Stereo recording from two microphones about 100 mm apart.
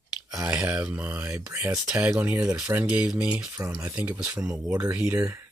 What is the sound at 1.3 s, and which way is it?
Speech, 30° right (ahead or behind).